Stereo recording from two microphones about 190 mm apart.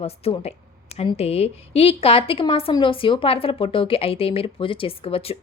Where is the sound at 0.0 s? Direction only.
35° left (ahead or behind).